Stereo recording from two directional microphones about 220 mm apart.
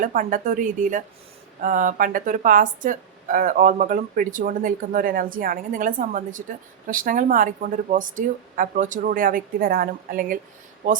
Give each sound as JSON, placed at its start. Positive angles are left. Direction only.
{"t": 0.0, "sound": "speech", "side_deg": -40}